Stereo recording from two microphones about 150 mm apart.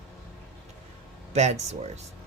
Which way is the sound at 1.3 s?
50° right (ahead or behind).